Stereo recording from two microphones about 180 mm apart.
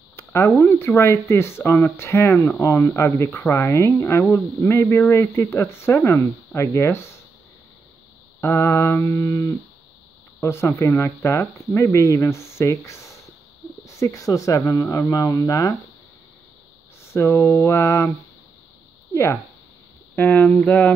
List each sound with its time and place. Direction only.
0.1 s speech: 15° left (ahead or behind)
8.4 s speech: 15° left (ahead or behind)
17.0 s speech: 15° left (ahead or behind)
20.2 s speech: 10° left (ahead or behind)